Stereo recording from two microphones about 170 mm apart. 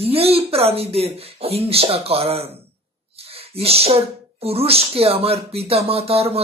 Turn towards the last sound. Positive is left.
turn(degrees=-35)  # may be behind; listen again after turning